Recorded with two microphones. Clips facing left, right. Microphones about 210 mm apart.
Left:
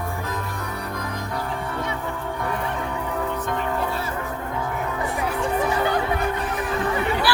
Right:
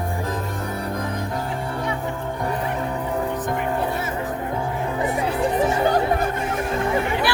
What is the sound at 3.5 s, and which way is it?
Music, 20° right (ahead or behind).